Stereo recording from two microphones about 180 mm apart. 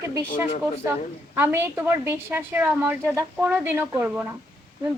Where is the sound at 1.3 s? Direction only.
15° right (ahead or behind).